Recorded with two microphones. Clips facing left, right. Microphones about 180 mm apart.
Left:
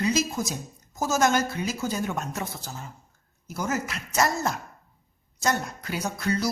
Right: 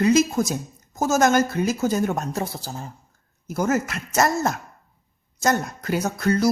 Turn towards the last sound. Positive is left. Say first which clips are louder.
# right 6 dB
turn(degrees=-50)  # may be behind; listen again after turning